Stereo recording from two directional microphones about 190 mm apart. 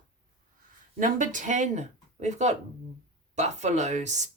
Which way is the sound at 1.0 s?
40° right (ahead or behind).